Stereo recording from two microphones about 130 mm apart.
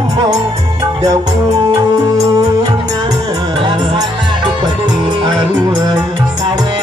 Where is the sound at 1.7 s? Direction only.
25° right (ahead or behind).